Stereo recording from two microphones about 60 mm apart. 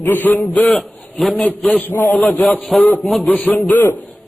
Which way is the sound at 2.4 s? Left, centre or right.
Centre.